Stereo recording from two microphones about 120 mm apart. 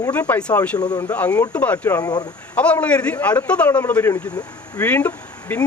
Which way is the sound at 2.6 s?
10° left (ahead or behind).